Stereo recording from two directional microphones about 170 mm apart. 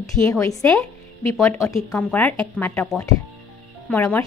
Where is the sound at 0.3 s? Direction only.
20° left (ahead or behind).